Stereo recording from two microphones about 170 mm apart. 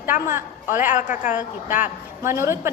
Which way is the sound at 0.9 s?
50° left (ahead or behind).